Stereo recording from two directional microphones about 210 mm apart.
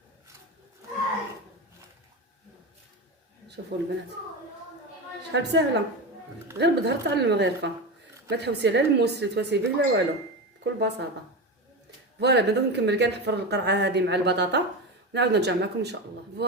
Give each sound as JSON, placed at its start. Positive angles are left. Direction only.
{"t": 3.7, "sound": "a woman's voice", "side_deg": -55}
{"t": 5.3, "sound": "a woman's voice", "side_deg": -55}
{"t": 12.2, "sound": "speech", "side_deg": -55}